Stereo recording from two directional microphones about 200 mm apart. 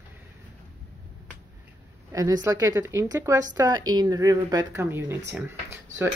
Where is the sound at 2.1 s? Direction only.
15° right (ahead or behind).